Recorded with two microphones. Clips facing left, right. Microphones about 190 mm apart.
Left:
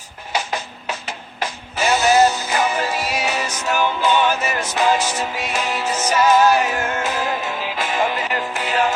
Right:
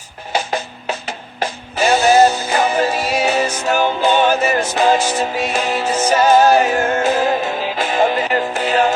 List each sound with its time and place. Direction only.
0.3 s music: 30° right (ahead or behind)